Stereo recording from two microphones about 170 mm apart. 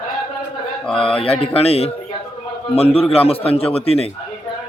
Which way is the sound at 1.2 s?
35° left (ahead or behind).